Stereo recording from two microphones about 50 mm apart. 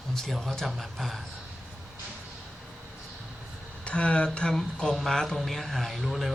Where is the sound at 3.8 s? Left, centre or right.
Left.